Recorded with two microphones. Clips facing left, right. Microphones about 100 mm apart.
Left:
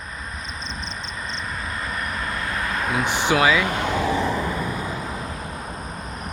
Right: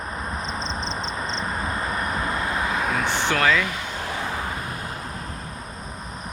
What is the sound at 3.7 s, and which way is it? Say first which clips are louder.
Speech: left 7 dB; 60° left (ahead or behind).